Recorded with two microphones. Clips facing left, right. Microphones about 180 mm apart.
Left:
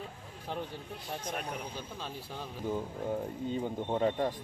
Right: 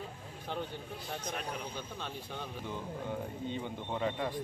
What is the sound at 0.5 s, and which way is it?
Speech, 5° left (ahead or behind).